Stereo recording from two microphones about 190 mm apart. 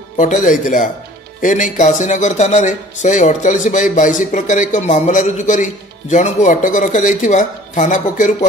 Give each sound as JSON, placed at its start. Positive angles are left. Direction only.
{"t": 0.2, "sound": "a man's voice", "side_deg": 45}